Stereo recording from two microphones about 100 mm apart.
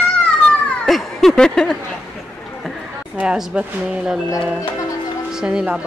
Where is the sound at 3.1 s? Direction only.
5° right (ahead or behind).